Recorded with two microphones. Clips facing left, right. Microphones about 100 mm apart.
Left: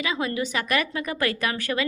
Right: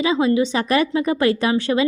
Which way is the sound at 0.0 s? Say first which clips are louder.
Right 9 dB; 25° right (ahead or behind).